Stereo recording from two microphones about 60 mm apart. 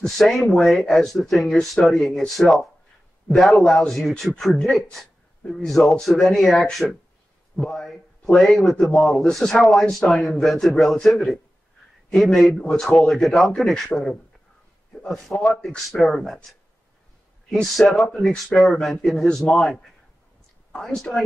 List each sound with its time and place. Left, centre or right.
0.0 s a man's voice: centre
3.6 s a man's voice: centre
15.0 s a man's voice: centre
17.5 s a man's voice: centre